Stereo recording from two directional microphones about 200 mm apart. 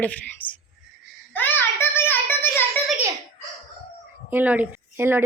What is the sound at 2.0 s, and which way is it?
Child singing, 10° left (ahead or behind).